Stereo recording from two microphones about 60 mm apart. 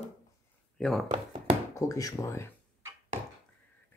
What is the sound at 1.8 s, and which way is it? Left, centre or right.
Speech, left.